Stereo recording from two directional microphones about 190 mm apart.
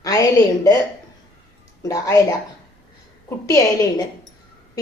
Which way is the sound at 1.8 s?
20° left (ahead or behind).